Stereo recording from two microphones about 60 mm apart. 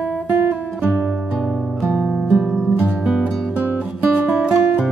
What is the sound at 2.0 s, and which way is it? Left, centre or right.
Music, centre.